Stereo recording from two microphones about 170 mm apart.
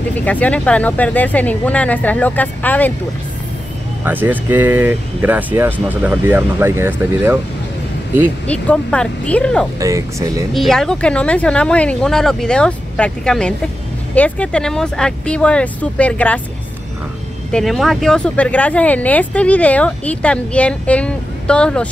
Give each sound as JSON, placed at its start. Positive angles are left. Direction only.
{"t": 0.1, "sound": "speech", "side_deg": 10}
{"t": 4.0, "sound": "speech", "side_deg": -10}
{"t": 8.5, "sound": "speech", "side_deg": 5}
{"t": 9.8, "sound": "speech", "side_deg": -20}
{"t": 10.5, "sound": "speech", "side_deg": 0}
{"t": 17.5, "sound": "speech", "side_deg": 0}